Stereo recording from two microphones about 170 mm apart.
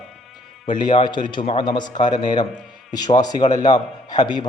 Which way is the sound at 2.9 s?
25° left (ahead or behind).